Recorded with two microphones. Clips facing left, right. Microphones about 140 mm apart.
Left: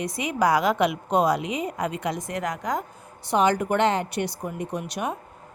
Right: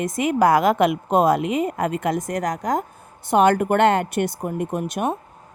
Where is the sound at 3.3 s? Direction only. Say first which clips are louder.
Right 5 dB; 55° right (ahead or behind).